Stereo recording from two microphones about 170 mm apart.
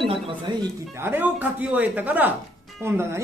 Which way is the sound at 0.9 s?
10° right (ahead or behind).